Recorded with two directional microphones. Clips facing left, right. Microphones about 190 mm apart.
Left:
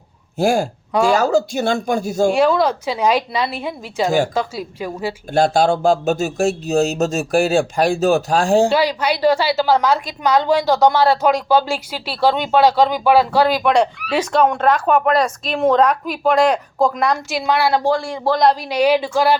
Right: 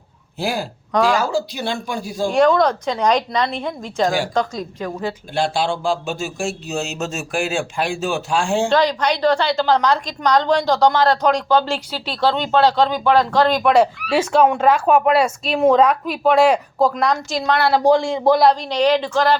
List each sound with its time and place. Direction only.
0.3 s speech: 45° left (ahead or behind)
2.3 s a woman's voice: 5° left (ahead or behind)
5.3 s speech: 45° left (ahead or behind)
8.7 s a woman's voice: 10° left (ahead or behind)
17.8 s speech: 20° right (ahead or behind)
18.7 s a woman's voice: 10° left (ahead or behind)